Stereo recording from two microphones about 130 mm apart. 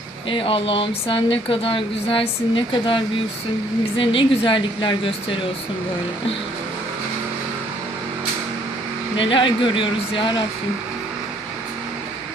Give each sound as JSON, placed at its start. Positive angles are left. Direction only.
{"t": 0.3, "sound": "speech", "side_deg": 40}
{"t": 9.1, "sound": "speech", "side_deg": 40}